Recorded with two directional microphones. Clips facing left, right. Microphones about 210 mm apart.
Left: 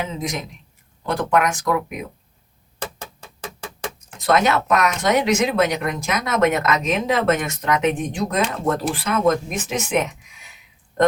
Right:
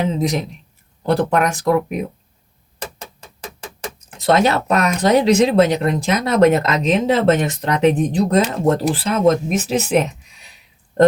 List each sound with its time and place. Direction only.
0.0 s speech: 35° right (ahead or behind)
4.2 s speech: 30° right (ahead or behind)